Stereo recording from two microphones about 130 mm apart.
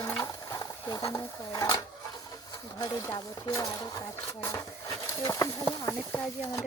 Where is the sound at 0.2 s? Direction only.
25° left (ahead or behind).